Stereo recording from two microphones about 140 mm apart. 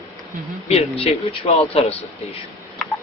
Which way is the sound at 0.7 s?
45° left (ahead or behind).